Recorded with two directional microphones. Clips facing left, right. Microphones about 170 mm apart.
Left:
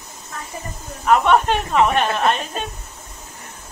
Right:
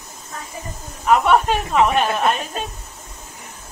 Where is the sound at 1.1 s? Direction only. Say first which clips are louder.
Even; 5° right (ahead or behind).